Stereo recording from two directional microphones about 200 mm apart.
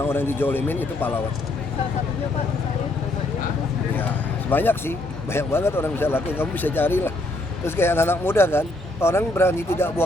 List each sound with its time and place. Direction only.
0.0 s speech: 10° left (ahead or behind)
3.9 s speech: 10° left (ahead or behind)